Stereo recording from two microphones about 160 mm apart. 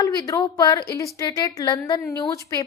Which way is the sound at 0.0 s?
20° left (ahead or behind).